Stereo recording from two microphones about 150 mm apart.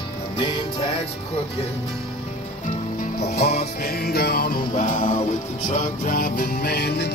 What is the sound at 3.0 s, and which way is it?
Music, 75° left (ahead or behind).